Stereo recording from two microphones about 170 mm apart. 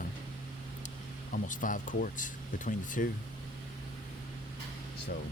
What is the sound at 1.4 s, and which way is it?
Speech, 50° left (ahead or behind).